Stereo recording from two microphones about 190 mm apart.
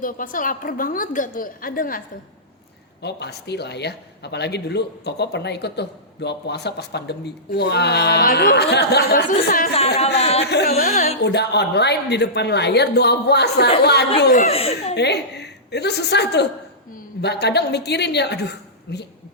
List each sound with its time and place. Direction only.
0.0 s a woman's voice: 45° left (ahead or behind)
3.0 s speech: 60° left (ahead or behind)
9.7 s speech: 30° left (ahead or behind)
10.4 s a woman's voice: 60° left (ahead or behind)
11.2 s speech: 60° left (ahead or behind)
14.4 s speech: 35° left (ahead or behind)
14.9 s a woman's voice: 60° left (ahead or behind)